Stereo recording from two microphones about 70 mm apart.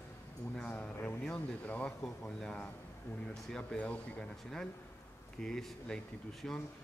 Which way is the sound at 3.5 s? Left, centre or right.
Centre.